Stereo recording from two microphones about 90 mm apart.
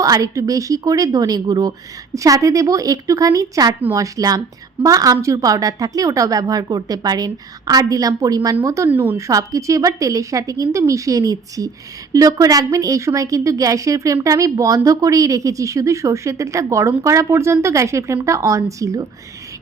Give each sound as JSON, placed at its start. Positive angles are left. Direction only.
{"t": 0.0, "sound": "a woman's voice", "side_deg": -40}
{"t": 8.9, "sound": "a woman's voice", "side_deg": -20}
{"t": 9.1, "sound": "a woman's voice", "side_deg": -35}